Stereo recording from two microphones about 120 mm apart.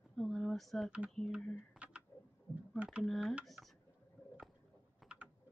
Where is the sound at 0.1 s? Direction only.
5° left (ahead or behind).